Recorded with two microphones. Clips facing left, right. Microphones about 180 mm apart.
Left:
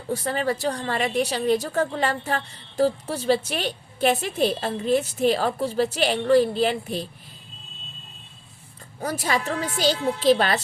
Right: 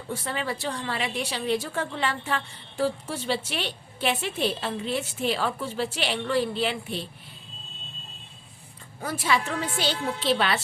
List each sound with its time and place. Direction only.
0.1 s a woman's voice: 40° left (ahead or behind)
9.0 s a woman's voice: 40° left (ahead or behind)